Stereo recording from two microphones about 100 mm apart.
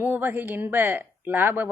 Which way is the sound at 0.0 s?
20° right (ahead or behind).